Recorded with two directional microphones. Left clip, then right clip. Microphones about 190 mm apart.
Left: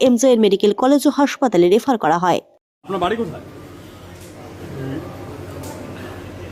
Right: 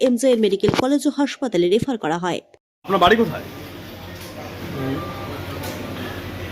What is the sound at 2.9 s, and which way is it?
Speech, 35° right (ahead or behind).